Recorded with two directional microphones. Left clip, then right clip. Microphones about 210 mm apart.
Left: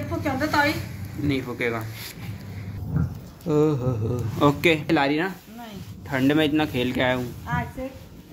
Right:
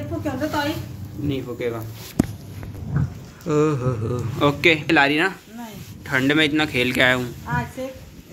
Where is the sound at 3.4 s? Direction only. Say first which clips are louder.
Right 2 dB; 5° left (ahead or behind).